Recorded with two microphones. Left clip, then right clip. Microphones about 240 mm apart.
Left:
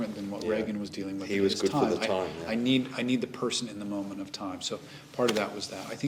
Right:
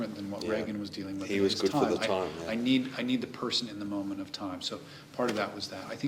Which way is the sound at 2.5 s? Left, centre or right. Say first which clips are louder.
Left 2 dB; left.